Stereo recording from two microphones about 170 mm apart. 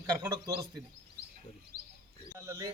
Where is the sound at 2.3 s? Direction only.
20° right (ahead or behind).